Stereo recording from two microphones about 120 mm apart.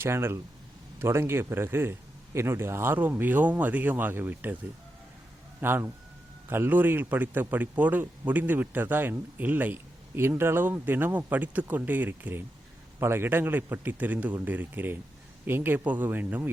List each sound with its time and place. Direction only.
0.0 s a man's voice: 20° right (ahead or behind)
5.5 s a man's voice: 15° right (ahead or behind)